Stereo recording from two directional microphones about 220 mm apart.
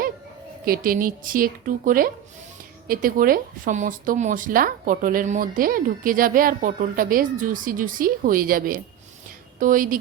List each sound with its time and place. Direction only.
0.6 s a woman's voice: 40° right (ahead or behind)